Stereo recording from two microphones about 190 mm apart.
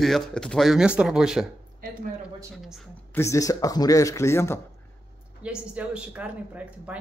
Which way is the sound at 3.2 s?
15° left (ahead or behind).